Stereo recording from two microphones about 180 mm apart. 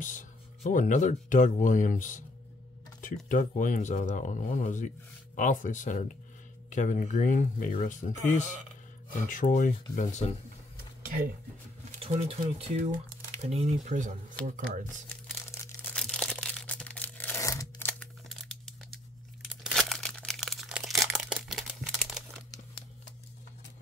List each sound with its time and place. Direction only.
0.0 s speech: 45° left (ahead or behind)
12.0 s speech: 35° right (ahead or behind)
15.8 s crushing: 5° left (ahead or behind)
19.6 s crumpling: centre (ahead or behind)